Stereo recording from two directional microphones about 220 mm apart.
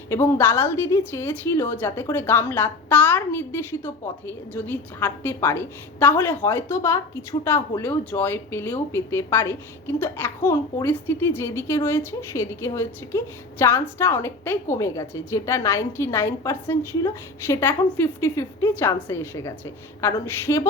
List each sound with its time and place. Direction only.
0.1 s a woman's voice: 10° left (ahead or behind)